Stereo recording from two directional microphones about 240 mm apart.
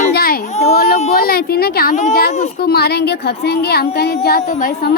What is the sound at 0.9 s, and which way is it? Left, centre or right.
A child's voice, left.